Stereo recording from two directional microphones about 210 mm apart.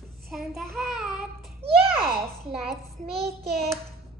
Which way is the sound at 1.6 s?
45° right (ahead or behind).